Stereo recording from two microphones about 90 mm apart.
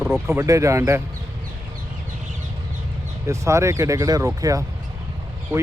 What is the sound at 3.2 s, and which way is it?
Speech, 35° right (ahead or behind).